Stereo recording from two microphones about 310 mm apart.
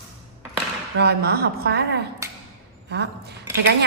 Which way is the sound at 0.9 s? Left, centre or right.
Right.